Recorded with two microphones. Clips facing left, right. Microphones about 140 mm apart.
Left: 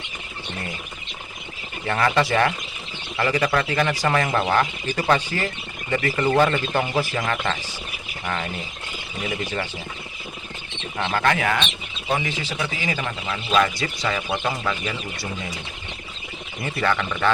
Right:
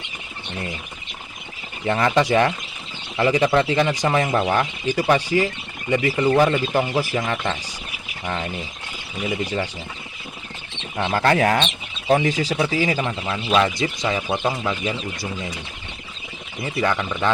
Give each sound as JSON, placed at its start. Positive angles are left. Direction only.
{"t": 1.9, "sound": "speech", "side_deg": -20}
{"t": 9.4, "sound": "speech", "side_deg": -15}
{"t": 11.1, "sound": "speech", "side_deg": -35}
{"t": 16.6, "sound": "speech", "side_deg": -15}